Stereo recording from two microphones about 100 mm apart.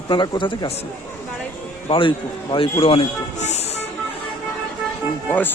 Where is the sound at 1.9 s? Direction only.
55° left (ahead or behind); by 3.1 s 70° left (ahead or behind).